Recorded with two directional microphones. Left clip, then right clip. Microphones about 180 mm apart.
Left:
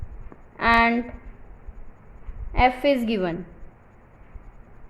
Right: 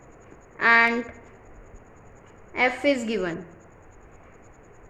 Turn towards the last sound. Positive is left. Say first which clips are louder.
# left 2 dB
turn(degrees=25)  # may be behind; listen again after turning